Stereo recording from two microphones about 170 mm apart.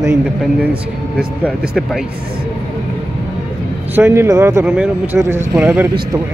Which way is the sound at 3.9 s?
15° right (ahead or behind).